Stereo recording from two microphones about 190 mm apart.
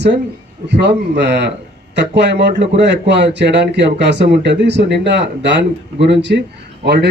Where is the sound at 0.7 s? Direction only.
65° right (ahead or behind).